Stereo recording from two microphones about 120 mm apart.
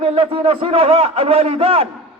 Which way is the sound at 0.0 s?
55° right (ahead or behind).